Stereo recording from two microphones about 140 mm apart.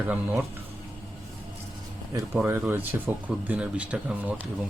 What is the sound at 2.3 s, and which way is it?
Speech, 10° right (ahead or behind).